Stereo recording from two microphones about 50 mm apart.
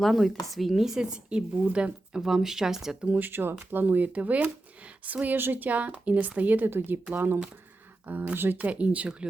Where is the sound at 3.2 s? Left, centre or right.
Right.